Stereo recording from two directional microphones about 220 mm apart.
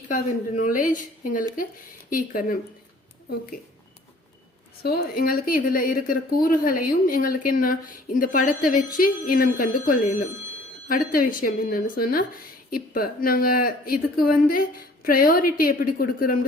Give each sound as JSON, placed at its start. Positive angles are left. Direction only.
{"t": 0.1, "sound": "a woman's voice", "side_deg": 35}
{"t": 4.8, "sound": "a woman's voice", "side_deg": 45}